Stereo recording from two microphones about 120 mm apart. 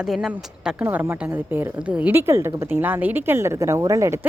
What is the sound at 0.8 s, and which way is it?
A woman's voice, 15° right (ahead or behind).